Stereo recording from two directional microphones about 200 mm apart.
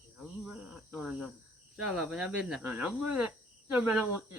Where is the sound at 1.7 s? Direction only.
5° right (ahead or behind).